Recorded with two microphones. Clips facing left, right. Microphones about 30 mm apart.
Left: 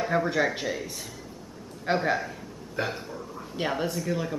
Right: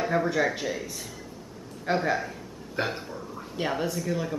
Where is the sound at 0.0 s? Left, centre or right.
Centre.